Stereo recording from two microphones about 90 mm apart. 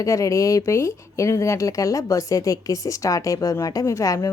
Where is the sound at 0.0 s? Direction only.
35° left (ahead or behind).